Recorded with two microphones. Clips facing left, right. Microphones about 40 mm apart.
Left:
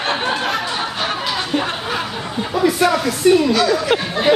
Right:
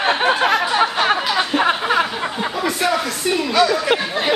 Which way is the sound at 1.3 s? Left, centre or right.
Centre.